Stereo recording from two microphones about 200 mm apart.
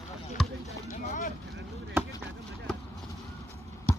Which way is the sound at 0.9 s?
40° left (ahead or behind).